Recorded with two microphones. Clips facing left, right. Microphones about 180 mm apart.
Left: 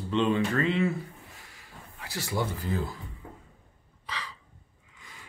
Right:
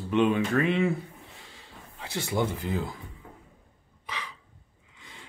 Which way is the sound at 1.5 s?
25° right (ahead or behind).